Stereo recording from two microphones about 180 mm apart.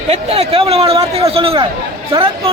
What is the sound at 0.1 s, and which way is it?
A man's voice, 35° right (ahead or behind).